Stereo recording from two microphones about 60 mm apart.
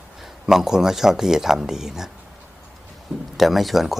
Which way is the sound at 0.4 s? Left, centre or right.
Centre.